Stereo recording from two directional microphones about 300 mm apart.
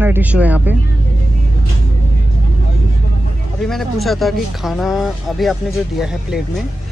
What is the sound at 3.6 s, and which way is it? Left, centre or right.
Speech, centre.